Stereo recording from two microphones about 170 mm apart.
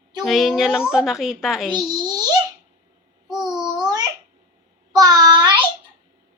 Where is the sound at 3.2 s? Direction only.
Centre (ahead or behind).